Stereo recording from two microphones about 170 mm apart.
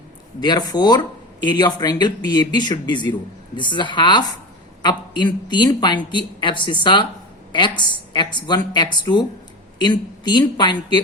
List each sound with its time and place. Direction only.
0.3 s speech: 25° left (ahead or behind)